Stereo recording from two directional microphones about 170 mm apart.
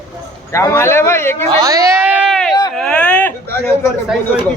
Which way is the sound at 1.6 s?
20° right (ahead or behind).